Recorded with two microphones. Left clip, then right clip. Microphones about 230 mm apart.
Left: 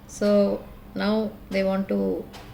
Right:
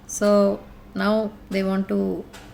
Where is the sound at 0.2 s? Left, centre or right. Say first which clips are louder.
Right 3 dB; right.